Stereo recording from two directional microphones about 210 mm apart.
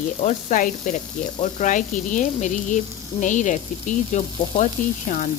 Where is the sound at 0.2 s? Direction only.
35° left (ahead or behind).